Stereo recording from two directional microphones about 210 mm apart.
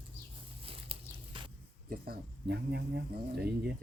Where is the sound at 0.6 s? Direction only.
25° right (ahead or behind).